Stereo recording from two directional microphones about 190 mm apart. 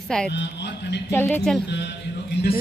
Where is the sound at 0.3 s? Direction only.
65° left (ahead or behind).